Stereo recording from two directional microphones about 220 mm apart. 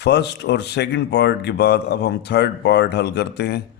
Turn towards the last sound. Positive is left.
turn(degrees=50)  # may be behind; listen again after turning